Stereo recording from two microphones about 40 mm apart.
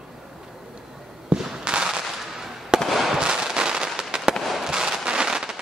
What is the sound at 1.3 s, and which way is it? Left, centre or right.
Fireworks, right.